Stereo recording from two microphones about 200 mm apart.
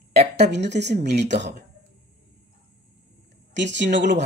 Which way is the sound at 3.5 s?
60° right (ahead or behind).